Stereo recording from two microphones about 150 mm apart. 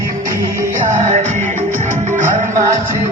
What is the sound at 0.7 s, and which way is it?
Music, 50° right (ahead or behind).